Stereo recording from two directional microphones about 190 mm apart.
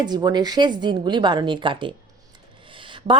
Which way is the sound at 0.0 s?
20° right (ahead or behind).